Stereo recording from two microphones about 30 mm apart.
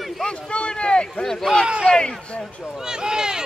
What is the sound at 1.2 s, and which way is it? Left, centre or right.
Speech, centre.